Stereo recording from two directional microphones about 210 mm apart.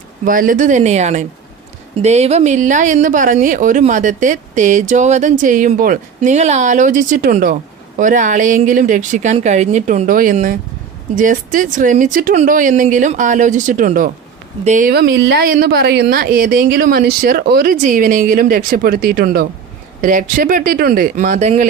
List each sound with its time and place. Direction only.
0.3 s speech: 40° right (ahead or behind)